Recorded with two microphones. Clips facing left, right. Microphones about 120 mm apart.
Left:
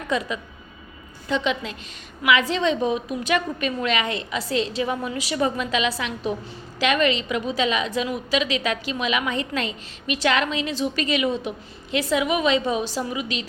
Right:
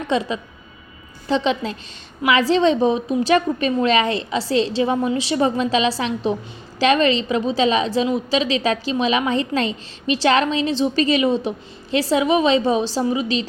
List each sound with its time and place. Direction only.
0.1 s a woman's voice: 25° right (ahead or behind)